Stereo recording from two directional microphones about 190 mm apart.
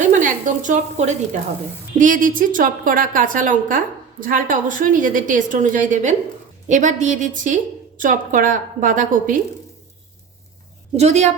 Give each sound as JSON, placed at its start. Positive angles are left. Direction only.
{"t": 0.1, "sound": "a woman's voice", "side_deg": -40}
{"t": 10.9, "sound": "a woman's voice", "side_deg": -35}